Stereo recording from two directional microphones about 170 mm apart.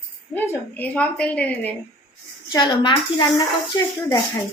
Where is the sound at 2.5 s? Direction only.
25° left (ahead or behind).